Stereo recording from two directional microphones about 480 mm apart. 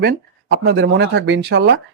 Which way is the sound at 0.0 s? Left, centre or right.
Centre.